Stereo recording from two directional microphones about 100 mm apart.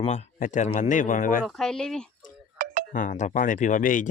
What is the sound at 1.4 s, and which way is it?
Speech, 5° left (ahead or behind).